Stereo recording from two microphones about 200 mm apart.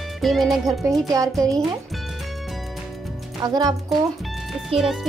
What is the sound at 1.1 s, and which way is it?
Speech, 15° right (ahead or behind).